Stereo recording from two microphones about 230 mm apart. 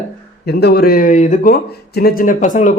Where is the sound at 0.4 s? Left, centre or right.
Left.